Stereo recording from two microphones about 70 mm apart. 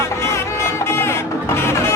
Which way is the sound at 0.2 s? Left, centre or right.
Left.